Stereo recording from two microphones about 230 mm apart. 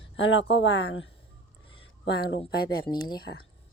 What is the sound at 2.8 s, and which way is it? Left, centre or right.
Speech, centre.